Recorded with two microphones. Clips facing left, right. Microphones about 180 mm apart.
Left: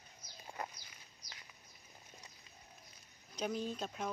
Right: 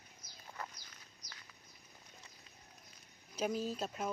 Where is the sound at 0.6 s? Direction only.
20° left (ahead or behind).